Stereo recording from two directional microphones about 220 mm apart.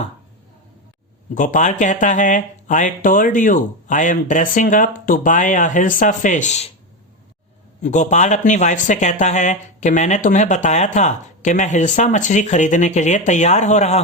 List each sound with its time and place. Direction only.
1.3 s speech: 35° left (ahead or behind)
7.8 s speech: 35° left (ahead or behind)